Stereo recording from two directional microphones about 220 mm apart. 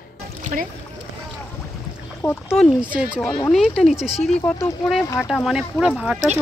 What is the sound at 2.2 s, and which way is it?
Speech, 10° left (ahead or behind).